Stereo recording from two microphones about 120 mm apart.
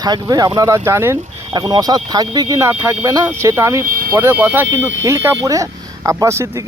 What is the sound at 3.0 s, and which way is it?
Speech, 30° right (ahead or behind).